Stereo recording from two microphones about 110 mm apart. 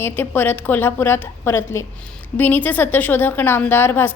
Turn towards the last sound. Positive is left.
turn(degrees=20)  # may be behind; listen again after turning